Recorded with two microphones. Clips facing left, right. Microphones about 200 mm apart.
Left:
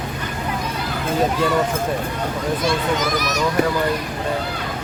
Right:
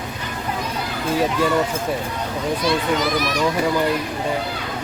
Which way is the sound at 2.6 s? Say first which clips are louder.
Right 2 dB; 45° left (ahead or behind).